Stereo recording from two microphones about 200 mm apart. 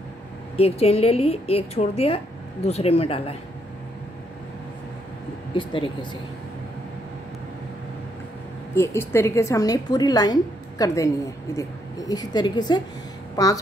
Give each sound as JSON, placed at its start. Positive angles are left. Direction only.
{"t": 0.6, "sound": "a woman's voice", "side_deg": 30}
{"t": 5.5, "sound": "a woman's voice", "side_deg": 25}
{"t": 8.7, "sound": "a woman's voice", "side_deg": 15}